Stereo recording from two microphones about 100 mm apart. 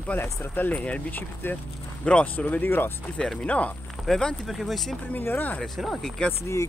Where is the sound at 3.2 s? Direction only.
10° left (ahead or behind).